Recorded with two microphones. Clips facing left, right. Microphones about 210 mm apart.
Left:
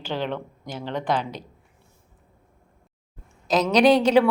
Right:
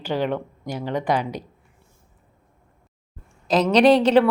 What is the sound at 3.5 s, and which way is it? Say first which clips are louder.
Speech: right 2 dB; 5° right (ahead or behind).